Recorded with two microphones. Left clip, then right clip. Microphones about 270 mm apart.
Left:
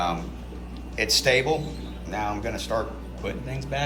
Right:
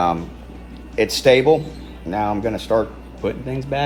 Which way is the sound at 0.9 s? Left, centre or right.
Right.